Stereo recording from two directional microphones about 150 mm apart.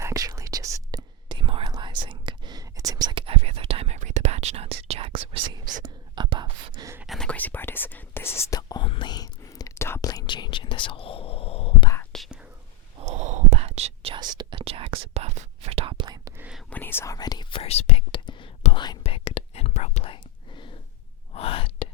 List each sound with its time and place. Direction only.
0.0 s whispering: 20° right (ahead or behind)
7.1 s whispering: 5° left (ahead or behind); by 11.9 s 40° left (ahead or behind)
12.1 s whispering: 5° right (ahead or behind)
13.0 s whispering: 50° right (ahead or behind); by 14.6 s 30° right (ahead or behind)
14.6 s whispering: 40° right (ahead or behind); by 16.3 s 25° right (ahead or behind)
16.4 s whispering: 5° right (ahead or behind)
16.6 s whispering: 10° left (ahead or behind); by 17.6 s 25° left (ahead or behind)
17.6 s whispering: 45° left (ahead or behind)
20.1 s whispering: 35° left (ahead or behind)